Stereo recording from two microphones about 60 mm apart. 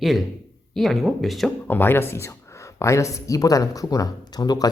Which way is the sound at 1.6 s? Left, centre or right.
Left.